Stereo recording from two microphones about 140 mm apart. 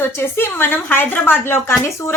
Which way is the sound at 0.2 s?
15° left (ahead or behind).